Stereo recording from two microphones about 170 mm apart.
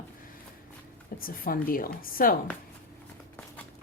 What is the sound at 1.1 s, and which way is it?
A woman's voice, 60° left (ahead or behind).